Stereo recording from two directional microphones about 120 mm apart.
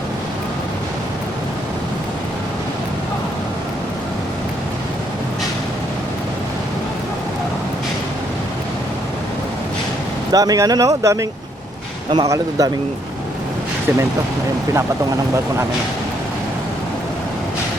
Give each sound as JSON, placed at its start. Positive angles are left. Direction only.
{"t": 10.3, "sound": "a man's voice", "side_deg": -30}